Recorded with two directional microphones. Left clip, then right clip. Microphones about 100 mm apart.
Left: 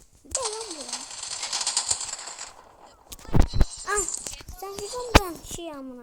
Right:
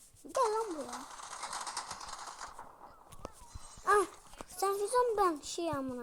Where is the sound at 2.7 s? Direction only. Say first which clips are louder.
Left 4 dB; 80° left.